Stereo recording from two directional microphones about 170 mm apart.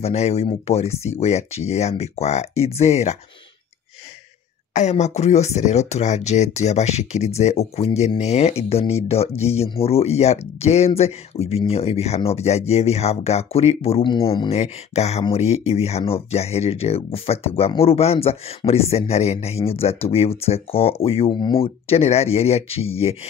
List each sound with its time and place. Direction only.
0.0 s speech: 40° left (ahead or behind)
4.7 s speech: 45° left (ahead or behind)